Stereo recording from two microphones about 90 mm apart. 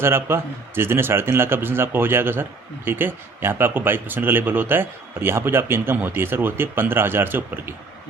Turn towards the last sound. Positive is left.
turn(degrees=-25)  # may be behind; listen again after turning